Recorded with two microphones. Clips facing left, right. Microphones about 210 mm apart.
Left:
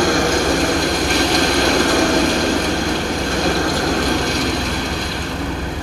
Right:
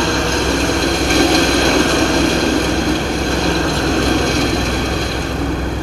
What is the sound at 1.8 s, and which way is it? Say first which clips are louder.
Vehicle: right 2 dB; 25° right (ahead or behind).